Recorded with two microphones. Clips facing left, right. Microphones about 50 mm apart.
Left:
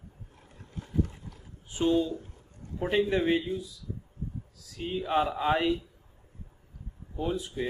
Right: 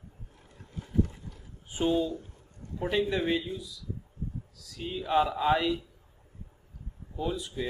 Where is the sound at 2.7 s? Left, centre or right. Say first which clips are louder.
Left 2 dB; centre.